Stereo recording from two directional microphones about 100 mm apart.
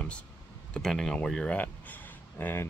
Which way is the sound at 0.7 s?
5° left (ahead or behind).